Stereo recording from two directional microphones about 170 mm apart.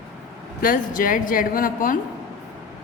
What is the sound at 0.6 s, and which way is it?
A woman's voice, 55° left (ahead or behind).